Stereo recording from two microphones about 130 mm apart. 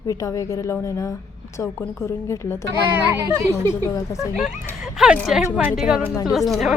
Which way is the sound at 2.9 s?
20° right (ahead or behind).